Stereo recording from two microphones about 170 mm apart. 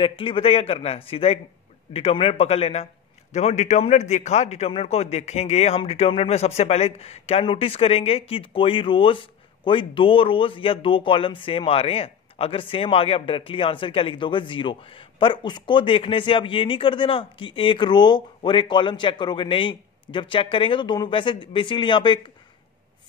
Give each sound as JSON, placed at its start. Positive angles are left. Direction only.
{"t": 0.0, "sound": "a man's voice", "side_deg": 30}